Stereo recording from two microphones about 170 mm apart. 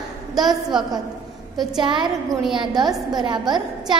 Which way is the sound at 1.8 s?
30° right (ahead or behind).